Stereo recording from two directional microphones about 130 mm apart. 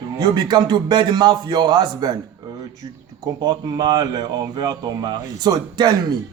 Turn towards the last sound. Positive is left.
turn(degrees=-30)  # may be behind; listen again after turning